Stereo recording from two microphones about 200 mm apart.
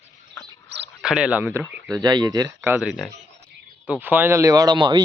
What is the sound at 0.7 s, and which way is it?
Cricket, 60° right (ahead or behind).